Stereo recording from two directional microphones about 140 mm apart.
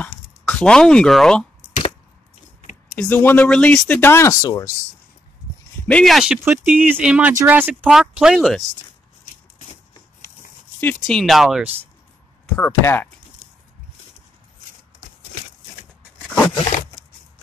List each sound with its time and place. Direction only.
0.0 s speech: 10° left (ahead or behind)
3.0 s speech: 15° left (ahead or behind)
5.9 s speech: 5° left (ahead or behind)
6.4 s speech: 15° right (ahead or behind)
10.8 s speech: 10° left (ahead or behind)
12.5 s speech: 15° left (ahead or behind)
16.2 s a sound: 5° left (ahead or behind)